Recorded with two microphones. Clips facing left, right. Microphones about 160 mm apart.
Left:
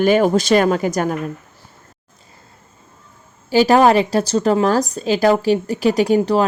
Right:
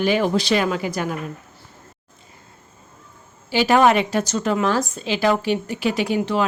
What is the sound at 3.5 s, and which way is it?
A woman's voice, 40° left (ahead or behind).